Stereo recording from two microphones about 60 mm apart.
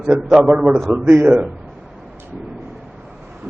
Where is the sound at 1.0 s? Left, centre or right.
Right.